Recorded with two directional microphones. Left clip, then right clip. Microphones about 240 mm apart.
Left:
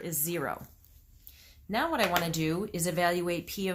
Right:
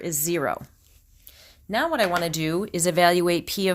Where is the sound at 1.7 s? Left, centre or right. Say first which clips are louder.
Right 5 dB; right.